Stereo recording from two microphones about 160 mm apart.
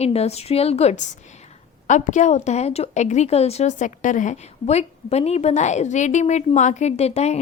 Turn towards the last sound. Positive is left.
turn(degrees=40)  # may be behind; listen again after turning